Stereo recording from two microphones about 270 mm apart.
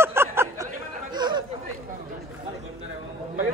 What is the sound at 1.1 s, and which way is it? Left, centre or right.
Chatter, centre.